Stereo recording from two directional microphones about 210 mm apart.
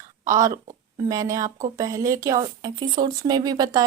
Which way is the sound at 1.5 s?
35° right (ahead or behind).